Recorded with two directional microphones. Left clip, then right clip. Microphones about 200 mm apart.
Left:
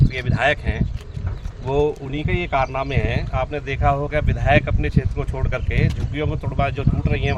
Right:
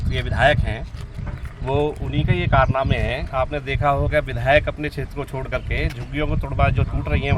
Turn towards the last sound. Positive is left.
turn(degrees=0)  # may be behind; listen again after turning